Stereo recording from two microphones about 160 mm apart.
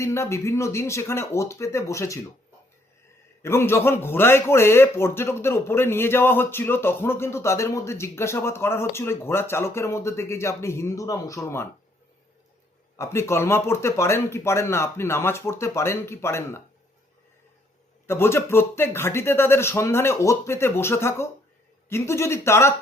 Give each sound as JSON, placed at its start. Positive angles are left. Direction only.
{"t": 0.0, "sound": "a man's voice", "side_deg": 15}
{"t": 3.4, "sound": "a man's voice", "side_deg": 15}
{"t": 13.0, "sound": "a man's voice", "side_deg": 15}
{"t": 18.0, "sound": "a man's voice", "side_deg": 15}